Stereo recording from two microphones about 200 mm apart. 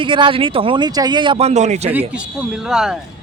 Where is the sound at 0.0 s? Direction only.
25° right (ahead or behind).